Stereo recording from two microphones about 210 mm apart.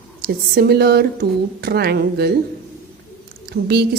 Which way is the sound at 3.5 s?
50° right (ahead or behind).